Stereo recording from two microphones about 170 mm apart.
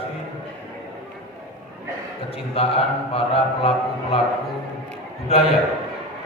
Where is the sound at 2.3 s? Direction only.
35° left (ahead or behind).